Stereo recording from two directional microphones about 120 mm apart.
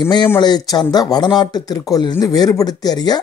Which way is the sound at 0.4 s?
35° left (ahead or behind).